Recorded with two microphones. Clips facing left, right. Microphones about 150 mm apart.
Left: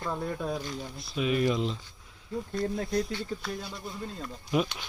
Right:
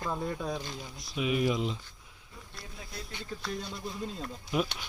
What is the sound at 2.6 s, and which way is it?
Speech, 60° left (ahead or behind).